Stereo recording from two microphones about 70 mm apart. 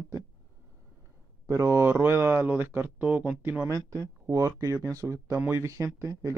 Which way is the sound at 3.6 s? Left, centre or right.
Right.